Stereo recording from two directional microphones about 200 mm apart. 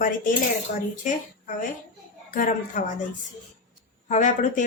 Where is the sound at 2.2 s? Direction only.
40° left (ahead or behind).